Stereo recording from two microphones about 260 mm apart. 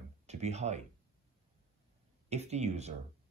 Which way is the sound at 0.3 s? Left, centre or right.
Right.